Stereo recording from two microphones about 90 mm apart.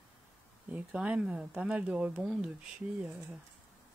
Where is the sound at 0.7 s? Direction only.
15° right (ahead or behind).